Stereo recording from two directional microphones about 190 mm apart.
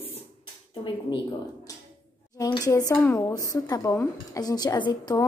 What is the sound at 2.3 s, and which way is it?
Speech, 20° left (ahead or behind).